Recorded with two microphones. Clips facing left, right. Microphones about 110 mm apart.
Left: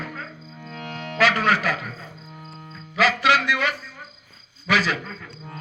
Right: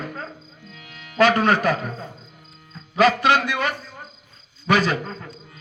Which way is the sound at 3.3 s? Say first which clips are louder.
Right 1 dB; 25° right (ahead or behind).